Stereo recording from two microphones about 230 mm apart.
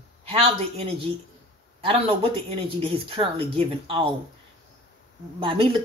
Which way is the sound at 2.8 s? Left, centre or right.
Right.